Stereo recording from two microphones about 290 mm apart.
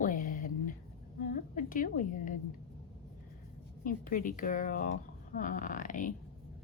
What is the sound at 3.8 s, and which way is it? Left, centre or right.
Speech, left.